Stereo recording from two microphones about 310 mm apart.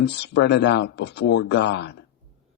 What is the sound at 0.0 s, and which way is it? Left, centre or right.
Speech, left.